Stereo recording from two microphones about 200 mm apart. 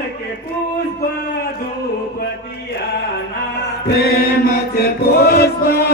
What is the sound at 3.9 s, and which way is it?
Chant, 50° left (ahead or behind).